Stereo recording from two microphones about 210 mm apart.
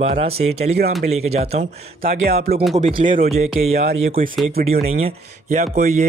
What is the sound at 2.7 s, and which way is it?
Speech, 35° right (ahead or behind).